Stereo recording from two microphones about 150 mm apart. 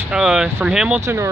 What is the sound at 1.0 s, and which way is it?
Speech, 20° right (ahead or behind).